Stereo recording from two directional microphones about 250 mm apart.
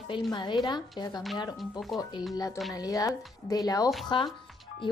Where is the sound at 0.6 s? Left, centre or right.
Centre.